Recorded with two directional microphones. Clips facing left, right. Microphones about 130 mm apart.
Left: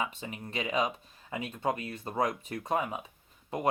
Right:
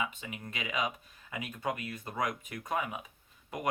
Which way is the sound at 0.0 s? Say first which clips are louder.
Left 2 dB; 35° left (ahead or behind).